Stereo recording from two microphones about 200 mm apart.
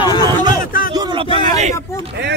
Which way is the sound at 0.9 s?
20° right (ahead or behind).